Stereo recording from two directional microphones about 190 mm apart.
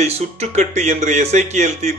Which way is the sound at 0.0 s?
35° right (ahead or behind).